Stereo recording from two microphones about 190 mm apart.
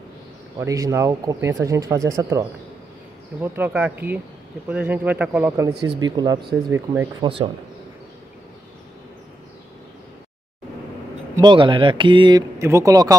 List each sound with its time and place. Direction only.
0.6 s speech: 15° right (ahead or behind)
11.3 s speech: 25° right (ahead or behind)